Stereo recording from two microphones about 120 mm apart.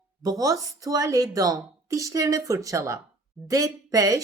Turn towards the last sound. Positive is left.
turn(degrees=-30)  # may be behind; listen again after turning